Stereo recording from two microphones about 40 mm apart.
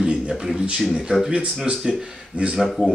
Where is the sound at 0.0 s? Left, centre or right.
Centre.